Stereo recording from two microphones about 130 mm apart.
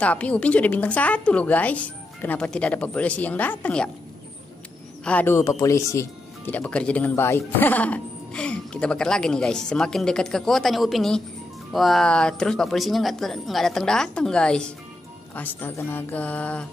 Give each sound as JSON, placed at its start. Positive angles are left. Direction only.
{"t": 0.0, "sound": "speech", "side_deg": 10}
{"t": 5.0, "sound": "a woman's voice", "side_deg": 15}